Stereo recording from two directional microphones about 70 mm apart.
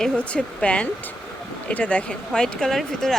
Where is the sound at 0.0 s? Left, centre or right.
Centre.